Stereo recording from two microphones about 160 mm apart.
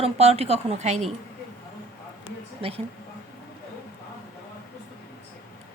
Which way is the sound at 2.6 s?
35° right (ahead or behind).